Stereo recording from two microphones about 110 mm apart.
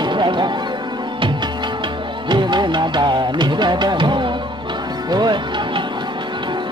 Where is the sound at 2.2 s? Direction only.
45° right (ahead or behind).